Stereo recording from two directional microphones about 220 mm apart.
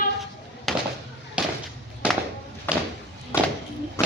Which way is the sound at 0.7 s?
Centre (ahead or behind).